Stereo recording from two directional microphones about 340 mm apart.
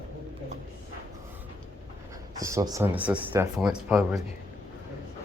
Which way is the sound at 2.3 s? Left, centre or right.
Centre.